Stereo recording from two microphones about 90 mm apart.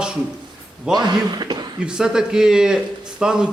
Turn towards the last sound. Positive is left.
turn(degrees=-10)  # may be behind; listen again after turning